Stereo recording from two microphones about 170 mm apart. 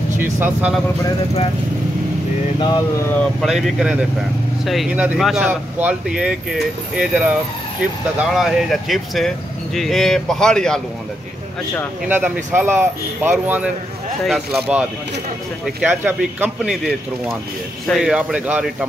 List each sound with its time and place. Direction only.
0.2 s speech: 10° right (ahead or behind)
2.6 s speech: 25° left (ahead or behind)
3.1 s speech: 5° left (ahead or behind)
8.4 s speech: centre (ahead or behind)
12.5 s speech: 15° right (ahead or behind)